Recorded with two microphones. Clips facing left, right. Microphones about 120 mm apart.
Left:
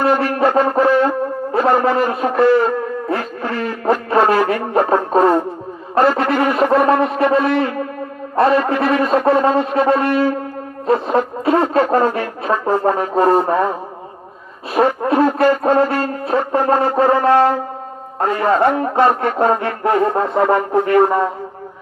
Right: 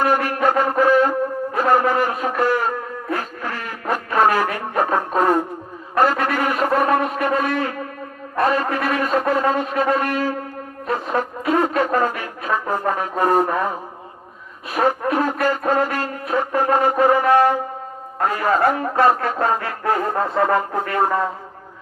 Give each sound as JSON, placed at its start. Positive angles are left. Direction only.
{"t": 0.0, "sound": "wind instrument", "side_deg": 30}
{"t": 1.5, "sound": "shofar", "side_deg": 30}
{"t": 3.1, "sound": "a sound", "side_deg": 30}
{"t": 4.1, "sound": "music", "side_deg": 30}
{"t": 5.9, "sound": "shofar", "side_deg": 30}
{"t": 10.8, "sound": "brass instrument", "side_deg": 30}
{"t": 14.7, "sound": "a sound", "side_deg": 30}
{"t": 18.9, "sound": "music", "side_deg": 25}